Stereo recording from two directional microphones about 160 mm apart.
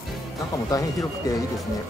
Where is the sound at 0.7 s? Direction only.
20° left (ahead or behind).